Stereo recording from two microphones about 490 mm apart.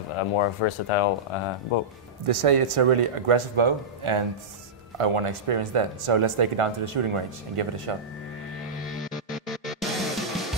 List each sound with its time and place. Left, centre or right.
0.2 s speech: left
2.2 s speech: right
4.9 s speech: right
9.0 s music: centre